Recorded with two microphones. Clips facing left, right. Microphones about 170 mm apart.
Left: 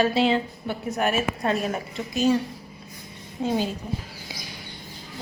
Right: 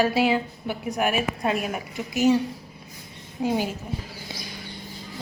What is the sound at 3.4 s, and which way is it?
Speech, 15° right (ahead or behind).